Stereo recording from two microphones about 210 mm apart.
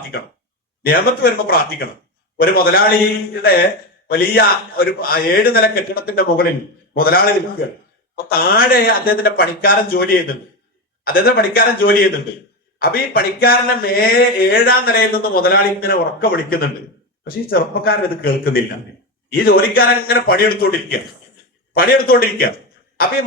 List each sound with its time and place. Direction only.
0.8 s speech: 45° left (ahead or behind)